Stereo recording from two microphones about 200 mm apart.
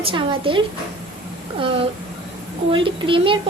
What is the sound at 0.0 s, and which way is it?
A woman's voice, 25° right (ahead or behind).